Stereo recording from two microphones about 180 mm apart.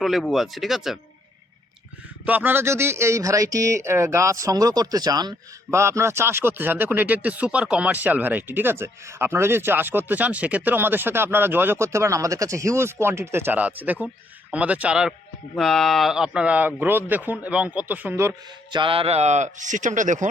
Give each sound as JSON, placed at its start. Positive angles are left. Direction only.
{"t": 0.0, "sound": "speech", "side_deg": 0}
{"t": 2.2, "sound": "a man's voice", "side_deg": -10}
{"t": 18.8, "sound": "speech", "side_deg": -30}